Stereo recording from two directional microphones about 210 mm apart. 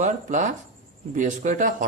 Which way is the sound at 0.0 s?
35° right (ahead or behind).